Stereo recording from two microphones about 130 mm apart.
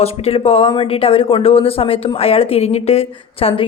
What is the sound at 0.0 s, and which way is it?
Speech, 50° left (ahead or behind).